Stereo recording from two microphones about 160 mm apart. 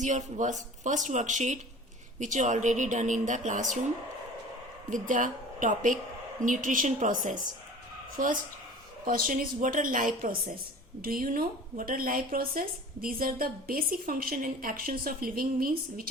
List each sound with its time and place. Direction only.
0.0 s speech: 50° right (ahead or behind)
4.9 s a woman's voice: 55° right (ahead or behind)